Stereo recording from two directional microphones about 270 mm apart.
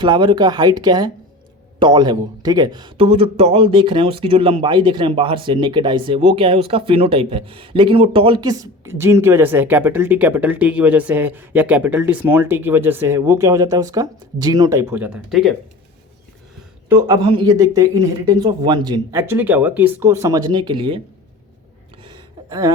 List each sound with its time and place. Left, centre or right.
0.0 s a man's voice: centre
16.9 s a man's voice: centre
22.0 s a sound: centre